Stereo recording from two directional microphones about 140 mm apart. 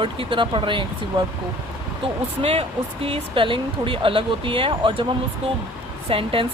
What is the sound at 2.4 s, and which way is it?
Speech, 45° right (ahead or behind).